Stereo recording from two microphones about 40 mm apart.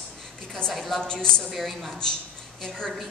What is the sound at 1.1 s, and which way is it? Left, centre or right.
Speech, centre.